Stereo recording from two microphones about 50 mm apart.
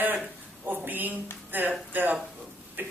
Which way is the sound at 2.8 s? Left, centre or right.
Right.